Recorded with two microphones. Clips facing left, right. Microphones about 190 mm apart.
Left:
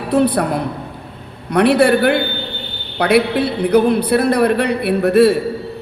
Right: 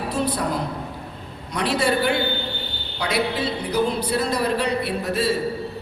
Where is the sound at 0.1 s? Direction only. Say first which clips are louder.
Left 10 dB; 60° left (ahead or behind).